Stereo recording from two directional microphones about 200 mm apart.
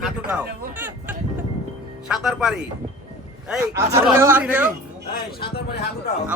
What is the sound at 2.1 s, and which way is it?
Speech, centre (ahead or behind).